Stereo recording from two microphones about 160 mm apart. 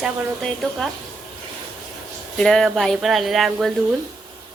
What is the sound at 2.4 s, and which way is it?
Speech, 5° left (ahead or behind).